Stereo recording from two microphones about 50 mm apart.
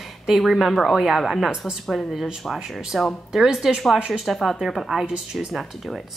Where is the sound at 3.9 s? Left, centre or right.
Centre.